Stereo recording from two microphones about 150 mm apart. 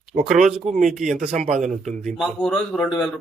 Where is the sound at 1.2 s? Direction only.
50° right (ahead or behind).